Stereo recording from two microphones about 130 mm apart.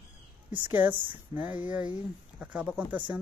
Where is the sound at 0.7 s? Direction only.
15° right (ahead or behind).